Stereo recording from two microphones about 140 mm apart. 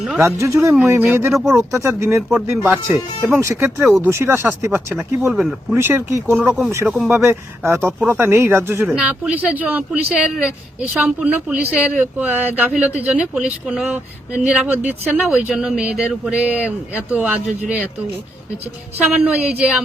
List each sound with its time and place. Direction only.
0.2 s speech: 20° right (ahead or behind)
1.3 s speech: centre (ahead or behind)
1.8 s speech: 20° right (ahead or behind)
5.3 s speech: centre (ahead or behind)
5.7 s speech: 15° right (ahead or behind)
6.8 s speech: centre (ahead or behind)
7.1 s speech: 20° right (ahead or behind)
8.9 s speech: 5° right (ahead or behind)
19.1 s speech: 5° right (ahead or behind)